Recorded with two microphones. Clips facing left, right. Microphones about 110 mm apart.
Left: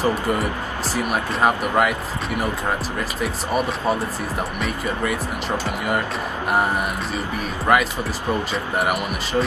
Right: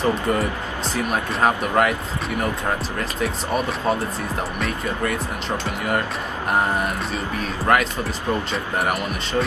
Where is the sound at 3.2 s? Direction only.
Centre (ahead or behind).